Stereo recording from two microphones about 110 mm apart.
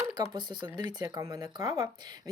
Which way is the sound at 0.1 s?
40° right (ahead or behind).